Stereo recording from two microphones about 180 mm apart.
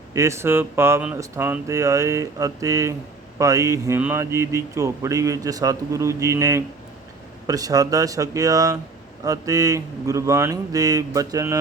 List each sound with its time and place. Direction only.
0.1 s speech: 15° right (ahead or behind)